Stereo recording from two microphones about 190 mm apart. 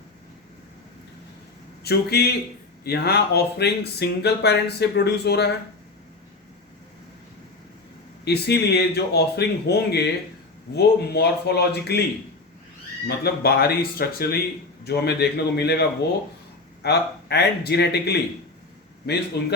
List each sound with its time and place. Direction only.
1.8 s speech: 55° left (ahead or behind)
8.2 s speech: 60° left (ahead or behind)
13.1 s speech: 55° left (ahead or behind)